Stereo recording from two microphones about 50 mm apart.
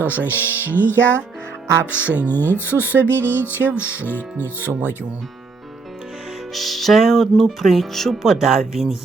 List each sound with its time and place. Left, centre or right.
0.0 s speech: left
1.9 s speech: left
3.0 s music: left
3.8 s speech: left
4.1 s speech: left
6.5 s music: centre